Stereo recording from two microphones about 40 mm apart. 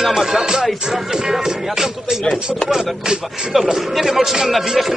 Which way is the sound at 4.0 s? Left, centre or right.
Centre.